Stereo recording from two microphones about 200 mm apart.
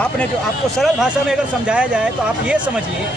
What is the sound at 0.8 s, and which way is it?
Speech, centre (ahead or behind).